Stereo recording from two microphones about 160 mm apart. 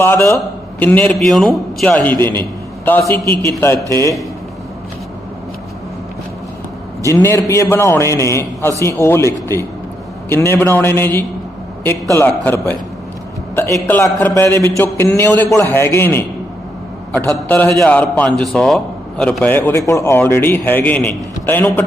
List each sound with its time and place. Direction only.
0.0 s a man's voice: 15° left (ahead or behind)
7.0 s a man's voice: 15° left (ahead or behind)
13.6 s a man's voice: 15° left (ahead or behind)